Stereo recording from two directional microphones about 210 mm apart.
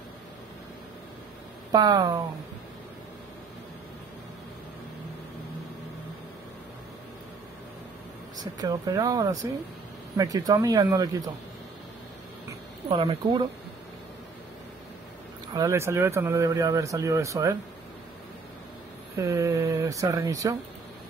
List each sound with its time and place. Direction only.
1.7 s speech: 20° right (ahead or behind)
8.4 s speech: 20° right (ahead or behind)
12.8 s speech: 25° right (ahead or behind)
15.5 s speech: 15° right (ahead or behind)
19.1 s speech: 15° right (ahead or behind)